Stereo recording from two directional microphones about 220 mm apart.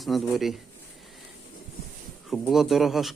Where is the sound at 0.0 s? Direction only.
Centre (ahead or behind).